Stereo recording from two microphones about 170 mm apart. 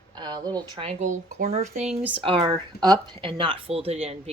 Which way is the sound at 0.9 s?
45° right (ahead or behind).